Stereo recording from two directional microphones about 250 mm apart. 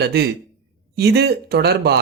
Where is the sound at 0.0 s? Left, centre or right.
Right.